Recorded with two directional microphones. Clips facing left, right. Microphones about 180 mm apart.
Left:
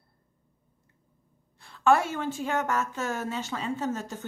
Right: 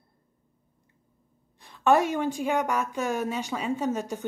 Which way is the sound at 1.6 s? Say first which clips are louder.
Right 1 dB; 20° right (ahead or behind).